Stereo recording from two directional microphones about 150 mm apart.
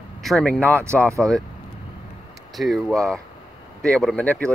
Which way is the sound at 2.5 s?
Centre (ahead or behind).